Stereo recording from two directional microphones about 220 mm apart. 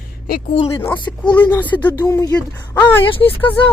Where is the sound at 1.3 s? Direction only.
10° left (ahead or behind).